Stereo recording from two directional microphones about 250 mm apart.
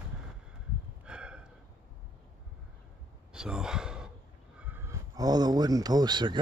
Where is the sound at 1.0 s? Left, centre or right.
Centre.